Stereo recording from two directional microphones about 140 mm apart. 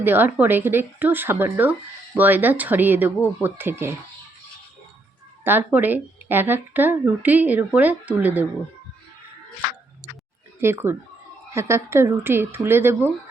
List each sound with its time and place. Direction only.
0.0 s speech: 15° right (ahead or behind)
5.5 s speech: 15° right (ahead or behind)
10.6 s speech: 15° right (ahead or behind)